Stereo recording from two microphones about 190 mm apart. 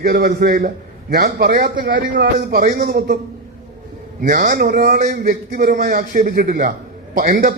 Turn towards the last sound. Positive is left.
turn(degrees=-45)  # may be behind; listen again after turning